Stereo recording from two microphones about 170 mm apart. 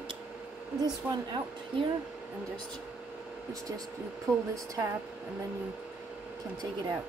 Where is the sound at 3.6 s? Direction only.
20° right (ahead or behind).